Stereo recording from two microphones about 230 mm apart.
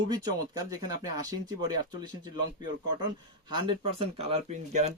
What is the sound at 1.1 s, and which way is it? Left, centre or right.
Speech, centre.